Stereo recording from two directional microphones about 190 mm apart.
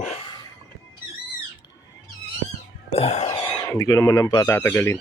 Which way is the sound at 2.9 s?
35° left (ahead or behind).